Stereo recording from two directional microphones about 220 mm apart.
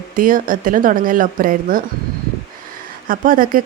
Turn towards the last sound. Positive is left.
turn(degrees=-40)  # may be behind; listen again after turning